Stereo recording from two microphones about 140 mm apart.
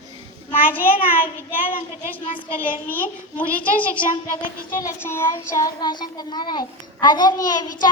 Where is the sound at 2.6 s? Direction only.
15° left (ahead or behind).